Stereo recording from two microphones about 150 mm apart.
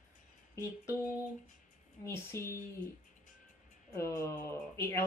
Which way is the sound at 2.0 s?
20° left (ahead or behind).